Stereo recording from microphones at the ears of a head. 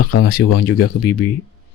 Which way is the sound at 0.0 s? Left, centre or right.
Left.